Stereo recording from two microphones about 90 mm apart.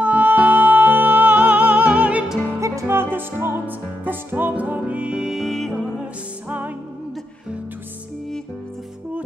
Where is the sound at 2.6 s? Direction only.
30° right (ahead or behind); by 5.7 s centre (ahead or behind).